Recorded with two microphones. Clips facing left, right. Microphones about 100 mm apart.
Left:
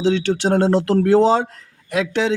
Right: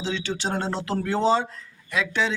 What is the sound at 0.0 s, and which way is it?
Speech, 65° left (ahead or behind).